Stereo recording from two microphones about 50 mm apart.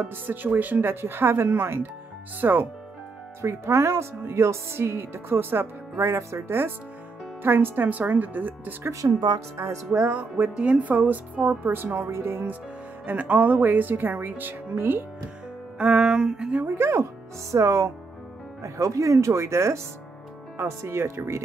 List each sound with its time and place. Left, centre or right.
0.0 s speech: right
1.0 s speech: right
3.4 s speech: right
5.9 s speech: right
6.4 s speech: right
9.0 s speech: right
9.6 s speech: right
10.0 s speech: right
12.1 s speech: right
13.0 s speech: right
15.8 s music: centre
16.6 s speech: right